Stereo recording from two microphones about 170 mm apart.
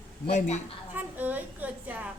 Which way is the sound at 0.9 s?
10° right (ahead or behind).